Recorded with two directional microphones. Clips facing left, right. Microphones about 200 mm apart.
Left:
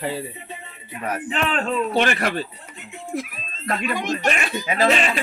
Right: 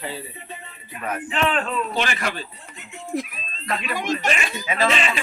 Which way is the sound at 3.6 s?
50° left (ahead or behind).